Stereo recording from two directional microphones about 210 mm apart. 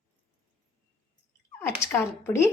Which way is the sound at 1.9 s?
10° left (ahead or behind).